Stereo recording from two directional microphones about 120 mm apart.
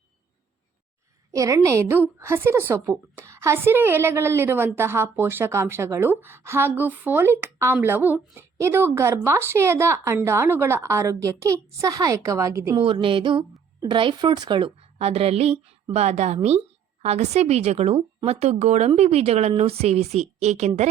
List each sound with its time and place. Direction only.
1.3 s a woman's voice: 25° right (ahead or behind)
12.7 s a sound: 45° right (ahead or behind)
13.8 s a woman's voice: 40° right (ahead or behind); by 20.8 s 70° right (ahead or behind)